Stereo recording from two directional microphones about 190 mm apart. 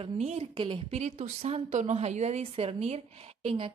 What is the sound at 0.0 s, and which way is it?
Speech, 30° right (ahead or behind).